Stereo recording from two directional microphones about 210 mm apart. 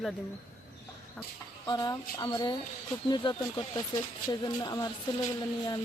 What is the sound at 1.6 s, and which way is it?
Speech, 20° left (ahead or behind).